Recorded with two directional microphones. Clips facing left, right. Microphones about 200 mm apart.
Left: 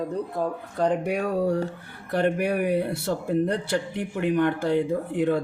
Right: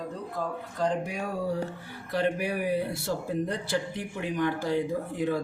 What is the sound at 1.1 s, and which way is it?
Speech, 65° left (ahead or behind).